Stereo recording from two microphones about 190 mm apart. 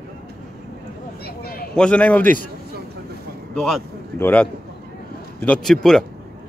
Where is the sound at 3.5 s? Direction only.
Centre (ahead or behind).